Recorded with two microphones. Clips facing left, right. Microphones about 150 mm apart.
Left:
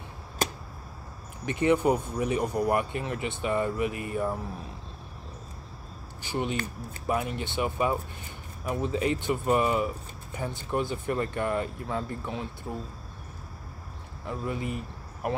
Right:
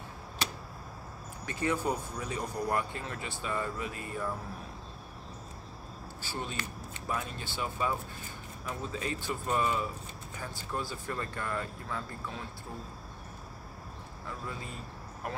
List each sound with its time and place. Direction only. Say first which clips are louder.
0.4 s a sound: left 7 dB; 45° left (ahead or behind)
1.4 s speech: left 8 dB; 20° left (ahead or behind)
6.2 s speech: left 8 dB; 15° left (ahead or behind)
14.2 s speech: left 9 dB; 20° left (ahead or behind)